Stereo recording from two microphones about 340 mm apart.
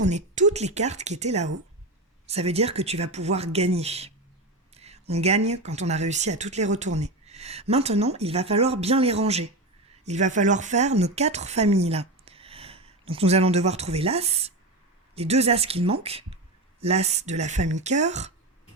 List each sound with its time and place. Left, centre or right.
0.0 s speech: right